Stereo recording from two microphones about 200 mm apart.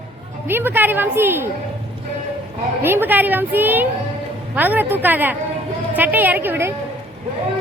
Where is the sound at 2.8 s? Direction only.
10° right (ahead or behind).